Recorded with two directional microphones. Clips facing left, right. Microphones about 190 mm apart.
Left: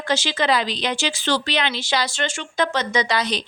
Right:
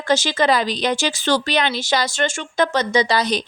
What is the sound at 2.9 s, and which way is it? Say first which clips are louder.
Speech: right 4 dB; 30° right (ahead or behind).